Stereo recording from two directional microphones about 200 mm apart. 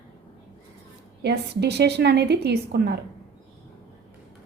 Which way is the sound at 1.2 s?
55° right (ahead or behind).